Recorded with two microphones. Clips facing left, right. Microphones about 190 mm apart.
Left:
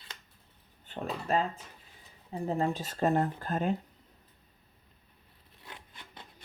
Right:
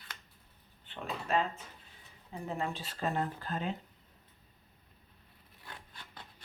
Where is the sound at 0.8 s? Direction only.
35° left (ahead or behind).